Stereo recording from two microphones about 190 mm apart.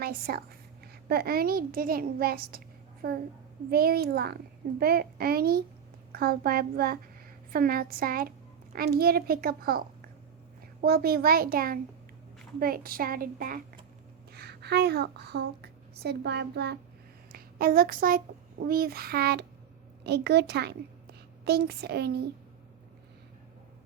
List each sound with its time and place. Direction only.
0.0 s a child's voice: 50° right (ahead or behind)
3.7 s child singing: 55° right (ahead or behind)
4.8 s a child's voice: 55° right (ahead or behind)
14.3 s a woman's voice: 60° right (ahead or behind)
18.6 s child singing: 55° right (ahead or behind)
20.1 s a woman's voice: 60° right (ahead or behind)